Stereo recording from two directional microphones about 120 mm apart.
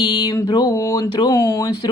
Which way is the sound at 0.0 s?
35° left (ahead or behind).